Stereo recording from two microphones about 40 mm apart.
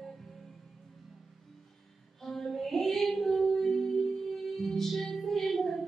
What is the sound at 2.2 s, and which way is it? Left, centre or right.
Female singing, centre.